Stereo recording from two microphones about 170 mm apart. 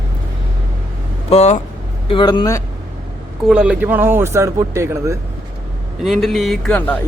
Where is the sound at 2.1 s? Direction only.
30° left (ahead or behind).